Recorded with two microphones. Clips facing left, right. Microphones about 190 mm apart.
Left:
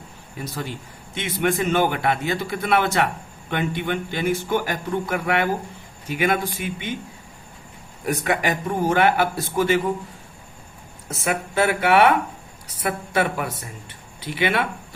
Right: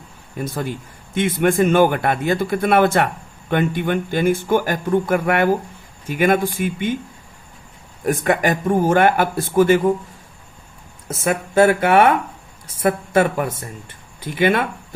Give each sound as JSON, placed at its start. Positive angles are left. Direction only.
{"t": 0.4, "sound": "a man's voice", "side_deg": -50}
{"t": 8.0, "sound": "a man's voice", "side_deg": -50}
{"t": 11.1, "sound": "a man's voice", "side_deg": -45}